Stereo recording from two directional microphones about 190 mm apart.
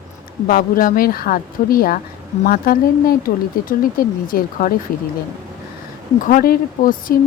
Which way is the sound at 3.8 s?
50° left (ahead or behind).